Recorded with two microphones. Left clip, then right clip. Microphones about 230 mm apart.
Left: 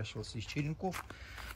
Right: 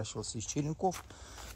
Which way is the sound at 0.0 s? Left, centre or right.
Centre.